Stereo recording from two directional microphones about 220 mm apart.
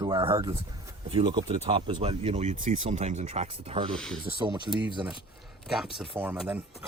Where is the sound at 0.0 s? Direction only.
20° right (ahead or behind).